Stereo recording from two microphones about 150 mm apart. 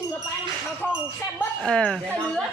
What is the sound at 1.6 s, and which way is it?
Speech, 5° left (ahead or behind).